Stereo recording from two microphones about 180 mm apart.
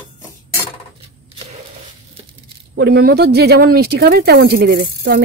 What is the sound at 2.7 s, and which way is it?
Speech, 65° right (ahead or behind).